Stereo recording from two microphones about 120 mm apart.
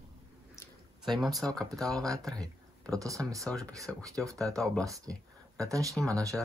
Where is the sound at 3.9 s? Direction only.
5° left (ahead or behind).